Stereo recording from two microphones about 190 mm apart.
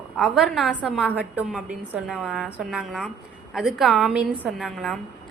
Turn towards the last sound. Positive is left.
turn(degrees=0)  # may be behind; listen again after turning